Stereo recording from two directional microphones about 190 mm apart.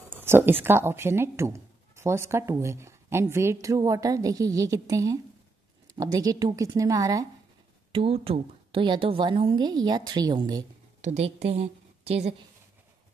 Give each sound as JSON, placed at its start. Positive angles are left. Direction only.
{"t": 0.1, "sound": "a sound", "side_deg": -10}
{"t": 0.7, "sound": "a woman's voice", "side_deg": -15}
{"t": 7.9, "sound": "a woman's voice", "side_deg": -30}
{"t": 11.0, "sound": "a woman's voice", "side_deg": -35}